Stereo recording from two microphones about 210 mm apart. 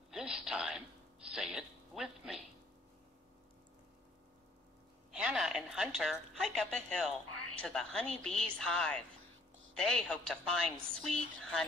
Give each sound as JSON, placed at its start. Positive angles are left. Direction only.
{"t": 0.1, "sound": "speech", "side_deg": -5}
{"t": 5.1, "sound": "a woman's voice", "side_deg": -5}